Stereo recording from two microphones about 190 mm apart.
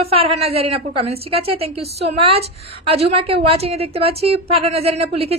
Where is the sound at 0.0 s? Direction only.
30° right (ahead or behind).